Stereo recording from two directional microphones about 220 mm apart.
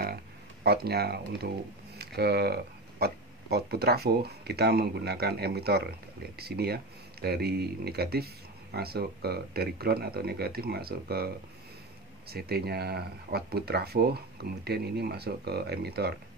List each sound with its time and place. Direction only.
0.7 s speech: 45° right (ahead or behind)